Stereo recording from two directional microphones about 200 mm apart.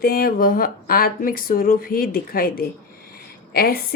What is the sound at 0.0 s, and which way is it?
Speech, 45° left (ahead or behind).